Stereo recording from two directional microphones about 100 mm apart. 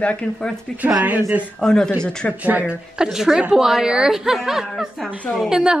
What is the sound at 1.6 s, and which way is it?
Speech, 5° left (ahead or behind).